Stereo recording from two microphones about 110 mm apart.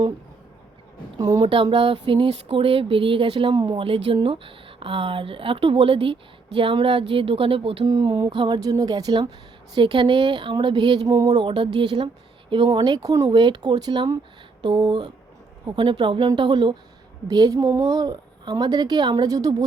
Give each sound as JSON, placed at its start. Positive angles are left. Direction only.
{"t": 1.2, "sound": "a woman's voice", "side_deg": -35}
{"t": 1.7, "sound": "speech", "side_deg": -55}
{"t": 2.5, "sound": "speech", "side_deg": -60}
{"t": 3.5, "sound": "speech", "side_deg": -40}
{"t": 7.9, "sound": "speech", "side_deg": -40}
{"t": 8.7, "sound": "a woman's voice", "side_deg": -35}
{"t": 9.7, "sound": "a woman's voice", "side_deg": -45}
{"t": 13.4, "sound": "a woman's voice", "side_deg": -40}
{"t": 17.2, "sound": "a woman's voice", "side_deg": -35}